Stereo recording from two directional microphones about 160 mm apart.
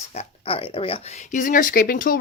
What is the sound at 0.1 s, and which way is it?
Speech, 40° left (ahead or behind).